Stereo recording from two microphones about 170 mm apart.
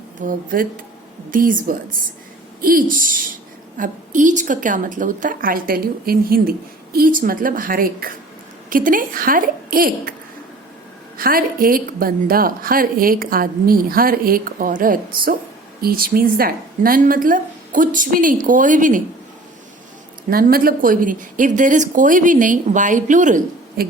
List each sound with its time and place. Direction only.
0.2 s speech: 55° right (ahead or behind)
2.6 s a sound: 55° right (ahead or behind)
3.8 s speech: 50° right (ahead or behind)
11.2 s speech: 55° right (ahead or behind)
20.3 s speech: 60° right (ahead or behind)